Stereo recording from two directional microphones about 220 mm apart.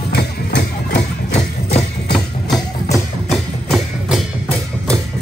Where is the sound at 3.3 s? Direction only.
Centre (ahead or behind).